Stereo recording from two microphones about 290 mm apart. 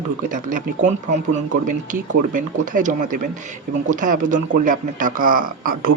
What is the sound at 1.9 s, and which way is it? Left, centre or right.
Speech, right.